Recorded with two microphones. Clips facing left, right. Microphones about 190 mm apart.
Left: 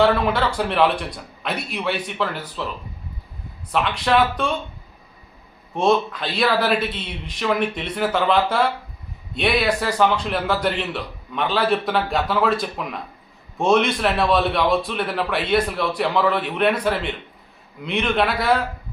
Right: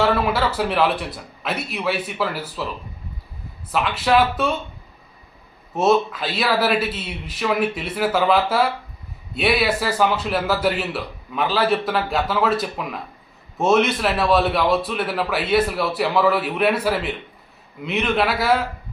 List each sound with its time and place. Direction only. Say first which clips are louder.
0.0 s a man's voice: left 1 dB; 5° right (ahead or behind)
3.7 s a man's voice: right 1 dB; 5° right (ahead or behind)
5.7 s a man's voice: right 1 dB; 5° right (ahead or behind)